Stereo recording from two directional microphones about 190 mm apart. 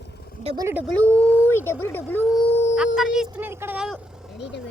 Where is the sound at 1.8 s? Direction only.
10° left (ahead or behind).